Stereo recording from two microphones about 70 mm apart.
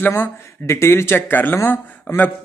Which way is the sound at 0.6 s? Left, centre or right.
Left.